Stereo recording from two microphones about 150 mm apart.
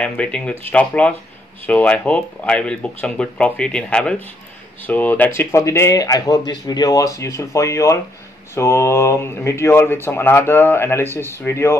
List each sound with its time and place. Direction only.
0.0 s speech: 5° left (ahead or behind)